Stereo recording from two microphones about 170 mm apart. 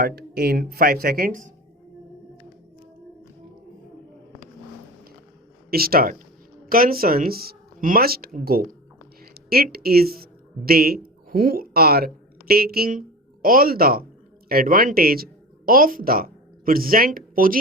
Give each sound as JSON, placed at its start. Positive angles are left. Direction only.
{"t": 0.0, "sound": "speech", "side_deg": -70}
{"t": 5.7, "sound": "speech", "side_deg": -60}
{"t": 9.3, "sound": "a sound", "side_deg": -65}
{"t": 9.7, "sound": "speech", "side_deg": -65}